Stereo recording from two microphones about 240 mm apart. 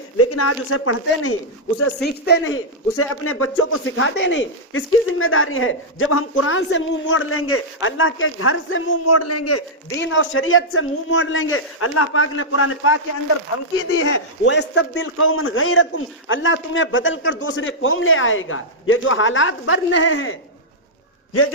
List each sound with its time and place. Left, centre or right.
0.2 s speech: left
2.0 s a man's voice: left
2.9 s speech: left
10.0 s a man's voice: left